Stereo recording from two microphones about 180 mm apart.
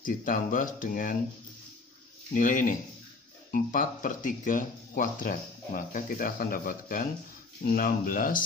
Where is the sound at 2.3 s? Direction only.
45° left (ahead or behind).